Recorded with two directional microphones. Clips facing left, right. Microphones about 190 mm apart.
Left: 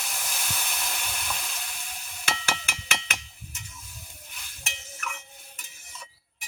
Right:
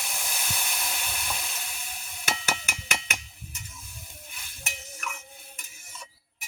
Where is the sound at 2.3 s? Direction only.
5° right (ahead or behind).